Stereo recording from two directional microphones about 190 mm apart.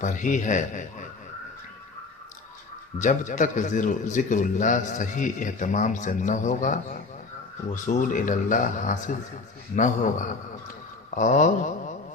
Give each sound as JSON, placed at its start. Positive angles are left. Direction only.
{"t": 0.0, "sound": "a man's voice", "side_deg": 40}
{"t": 3.0, "sound": "a man's voice", "side_deg": 40}